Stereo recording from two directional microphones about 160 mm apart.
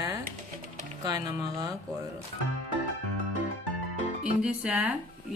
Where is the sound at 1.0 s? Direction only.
25° right (ahead or behind).